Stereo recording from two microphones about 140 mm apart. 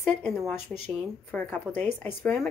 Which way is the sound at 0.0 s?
5° left (ahead or behind).